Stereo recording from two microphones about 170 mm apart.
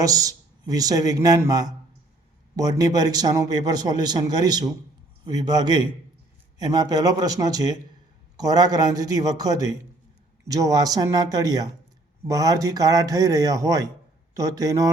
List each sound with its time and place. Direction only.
0.0 s a man's voice: 20° right (ahead or behind)